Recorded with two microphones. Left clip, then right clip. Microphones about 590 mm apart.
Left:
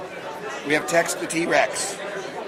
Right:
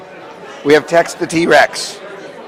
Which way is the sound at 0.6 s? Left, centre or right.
Right.